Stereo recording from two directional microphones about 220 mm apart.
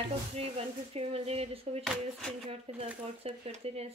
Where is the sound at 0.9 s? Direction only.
25° right (ahead or behind).